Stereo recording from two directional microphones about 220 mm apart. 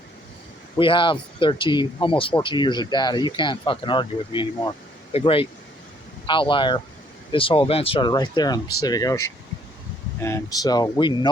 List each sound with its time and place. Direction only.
0.8 s speech: 20° left (ahead or behind)